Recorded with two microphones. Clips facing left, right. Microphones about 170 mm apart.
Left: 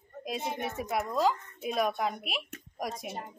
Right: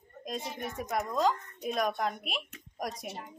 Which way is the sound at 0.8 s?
Centre (ahead or behind).